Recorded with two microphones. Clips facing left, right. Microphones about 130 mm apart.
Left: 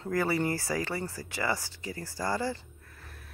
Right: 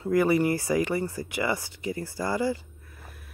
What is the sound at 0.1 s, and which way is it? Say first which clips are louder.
Speech: right 6 dB; 15° right (ahead or behind).